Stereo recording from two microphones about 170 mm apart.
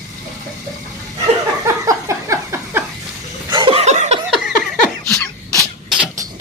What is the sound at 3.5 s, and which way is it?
Chuckle, 30° right (ahead or behind).